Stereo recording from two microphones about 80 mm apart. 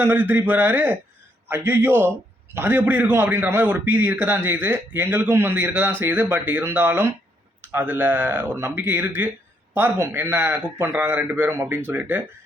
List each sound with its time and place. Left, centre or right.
0.0 s a man's voice: right
3.4 s a man's voice: right
8.5 s a man's voice: right
8.8 s a man's voice: right
10.6 s a man's voice: centre